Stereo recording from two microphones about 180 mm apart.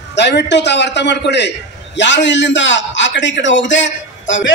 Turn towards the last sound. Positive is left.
turn(degrees=90)